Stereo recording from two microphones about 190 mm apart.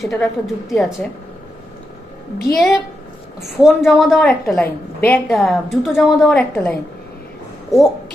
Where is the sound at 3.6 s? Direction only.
Centre (ahead or behind).